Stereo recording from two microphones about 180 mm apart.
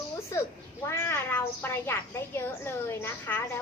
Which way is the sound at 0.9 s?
10° left (ahead or behind).